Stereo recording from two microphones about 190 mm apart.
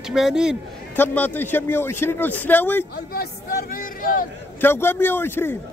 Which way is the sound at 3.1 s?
50° left (ahead or behind).